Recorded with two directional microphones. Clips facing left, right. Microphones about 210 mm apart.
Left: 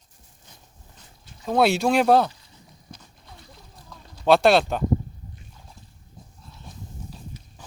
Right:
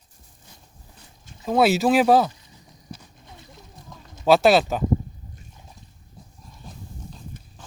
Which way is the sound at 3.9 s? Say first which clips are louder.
Even; 20° right (ahead or behind).